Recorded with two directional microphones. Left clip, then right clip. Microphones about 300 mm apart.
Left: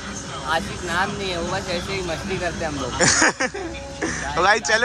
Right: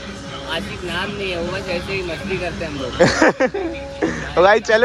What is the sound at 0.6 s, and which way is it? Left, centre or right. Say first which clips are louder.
Speech: left 1 dB; left.